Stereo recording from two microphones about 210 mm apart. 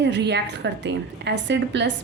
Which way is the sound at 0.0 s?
55° right (ahead or behind).